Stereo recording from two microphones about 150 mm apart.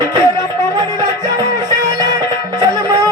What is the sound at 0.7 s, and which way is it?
Music, 25° right (ahead or behind).